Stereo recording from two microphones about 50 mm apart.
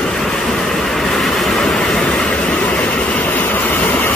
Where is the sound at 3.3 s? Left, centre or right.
Left.